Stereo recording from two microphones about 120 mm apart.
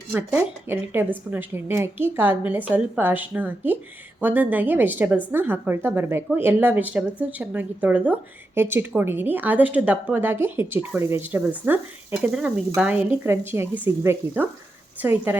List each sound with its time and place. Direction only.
0.1 s a woman's voice: 15° right (ahead or behind)